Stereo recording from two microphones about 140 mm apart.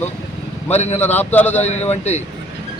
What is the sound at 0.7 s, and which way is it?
Speech, 50° left (ahead or behind).